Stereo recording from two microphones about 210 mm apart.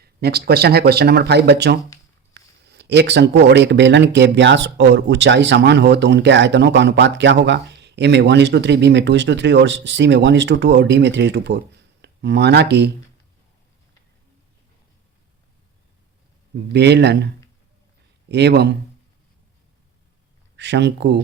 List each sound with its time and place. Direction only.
0.0 s a man's voice: 50° right (ahead or behind)
16.7 s speech: 55° right (ahead or behind)
20.6 s a man's voice: 55° right (ahead or behind)